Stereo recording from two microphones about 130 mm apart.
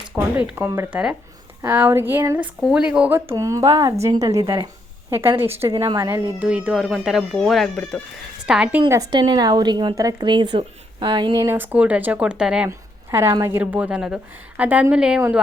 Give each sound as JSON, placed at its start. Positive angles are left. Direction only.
{"t": 0.1, "sound": "a woman's voice", "side_deg": -10}
{"t": 2.6, "sound": "a woman's voice", "side_deg": -5}
{"t": 4.4, "sound": "speech", "side_deg": -40}
{"t": 5.8, "sound": "speech", "side_deg": -25}
{"t": 8.4, "sound": "a woman's voice", "side_deg": -10}
{"t": 9.0, "sound": "speech", "side_deg": -35}
{"t": 11.4, "sound": "a woman's voice", "side_deg": -15}
{"t": 13.1, "sound": "a woman's voice", "side_deg": -20}